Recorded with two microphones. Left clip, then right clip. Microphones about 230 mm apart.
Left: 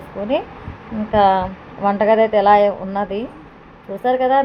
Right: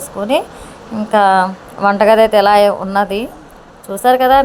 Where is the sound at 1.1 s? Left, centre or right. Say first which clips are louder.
Right 4 dB; centre.